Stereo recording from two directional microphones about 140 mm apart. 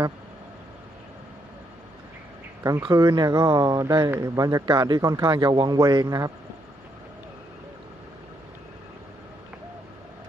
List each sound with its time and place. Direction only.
2.8 s speech: 30° right (ahead or behind)